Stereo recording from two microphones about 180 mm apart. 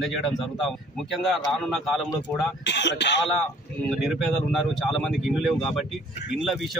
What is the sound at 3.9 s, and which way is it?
Speech, centre (ahead or behind).